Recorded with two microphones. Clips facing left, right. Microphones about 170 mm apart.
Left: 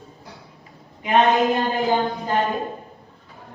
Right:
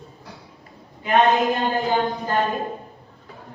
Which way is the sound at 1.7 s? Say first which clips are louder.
Left 1 dB; 20° left (ahead or behind).